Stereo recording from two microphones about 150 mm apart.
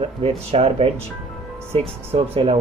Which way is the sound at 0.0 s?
40° right (ahead or behind).